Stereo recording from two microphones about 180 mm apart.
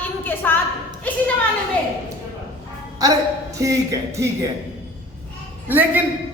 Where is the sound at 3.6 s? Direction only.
20° right (ahead or behind).